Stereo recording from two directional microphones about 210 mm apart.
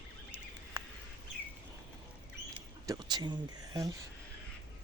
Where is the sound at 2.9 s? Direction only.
20° right (ahead or behind).